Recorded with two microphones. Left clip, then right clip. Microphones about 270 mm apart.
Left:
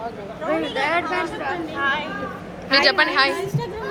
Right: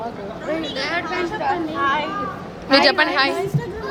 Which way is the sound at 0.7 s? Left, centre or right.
Left.